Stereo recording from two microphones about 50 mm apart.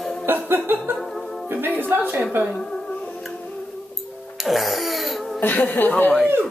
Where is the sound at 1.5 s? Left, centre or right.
Right.